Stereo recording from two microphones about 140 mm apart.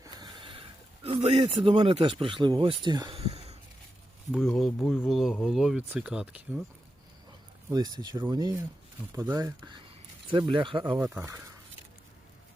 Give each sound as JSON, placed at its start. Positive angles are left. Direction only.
{"t": 0.0, "sound": "speech", "side_deg": -30}
{"t": 3.2, "sound": "a sound", "side_deg": -50}
{"t": 4.3, "sound": "speech", "side_deg": 0}
{"t": 7.7, "sound": "speech", "side_deg": -30}
{"t": 10.9, "sound": "speech", "side_deg": -10}